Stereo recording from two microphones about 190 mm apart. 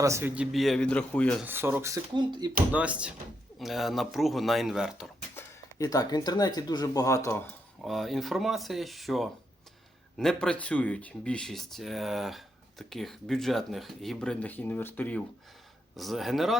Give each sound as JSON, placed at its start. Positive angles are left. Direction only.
{"t": 0.0, "sound": "speech", "side_deg": -15}
{"t": 1.5, "sound": "speech", "side_deg": -10}
{"t": 2.1, "sound": "speech", "side_deg": -25}
{"t": 2.7, "sound": "speech", "side_deg": -5}
{"t": 5.4, "sound": "speech", "side_deg": 20}
{"t": 7.8, "sound": "speech", "side_deg": 0}